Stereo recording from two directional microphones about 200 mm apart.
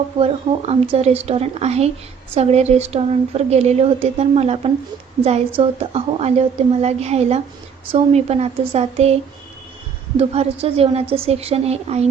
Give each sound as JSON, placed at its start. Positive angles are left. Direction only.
{"t": 0.2, "sound": "a woman's voice", "side_deg": -30}
{"t": 10.2, "sound": "a woman's voice", "side_deg": -30}